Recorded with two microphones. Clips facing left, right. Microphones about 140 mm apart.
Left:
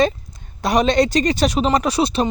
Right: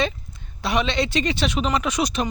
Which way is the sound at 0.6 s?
40° left (ahead or behind).